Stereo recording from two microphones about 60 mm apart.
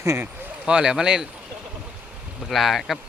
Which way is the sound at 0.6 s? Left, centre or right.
Centre.